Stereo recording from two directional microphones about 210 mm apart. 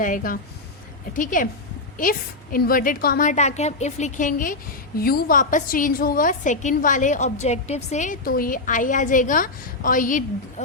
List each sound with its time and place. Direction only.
0.0 s a woman's voice: 40° left (ahead or behind)